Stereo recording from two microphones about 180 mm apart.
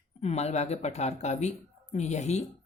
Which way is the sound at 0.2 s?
35° left (ahead or behind).